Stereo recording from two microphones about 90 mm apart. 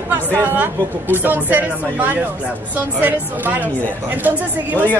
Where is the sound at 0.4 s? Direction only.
20° right (ahead or behind).